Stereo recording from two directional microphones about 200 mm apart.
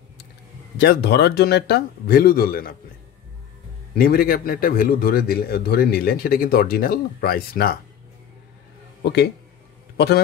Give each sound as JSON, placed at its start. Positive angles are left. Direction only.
{"t": 0.7, "sound": "a man's voice", "side_deg": 55}
{"t": 3.9, "sound": "a man's voice", "side_deg": 50}
{"t": 9.9, "sound": "a man's voice", "side_deg": 55}